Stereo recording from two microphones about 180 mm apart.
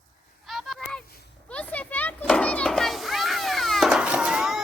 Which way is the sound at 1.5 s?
10° left (ahead or behind).